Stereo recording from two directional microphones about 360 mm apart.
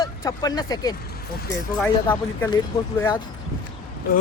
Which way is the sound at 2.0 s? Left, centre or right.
Centre.